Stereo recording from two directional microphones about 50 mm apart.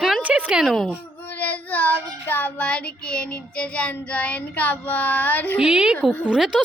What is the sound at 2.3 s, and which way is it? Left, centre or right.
Speech, left.